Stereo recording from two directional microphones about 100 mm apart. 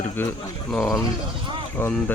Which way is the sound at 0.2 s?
20° left (ahead or behind).